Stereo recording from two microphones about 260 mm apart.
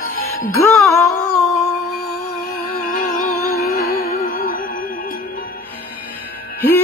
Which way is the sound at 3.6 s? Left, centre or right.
Left.